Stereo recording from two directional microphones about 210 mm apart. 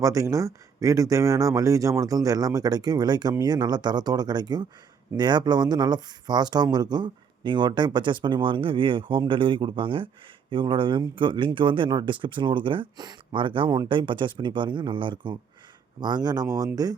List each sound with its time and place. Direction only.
0.0 s speech: 15° right (ahead or behind)